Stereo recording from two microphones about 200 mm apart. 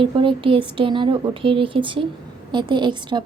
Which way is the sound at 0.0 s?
25° right (ahead or behind).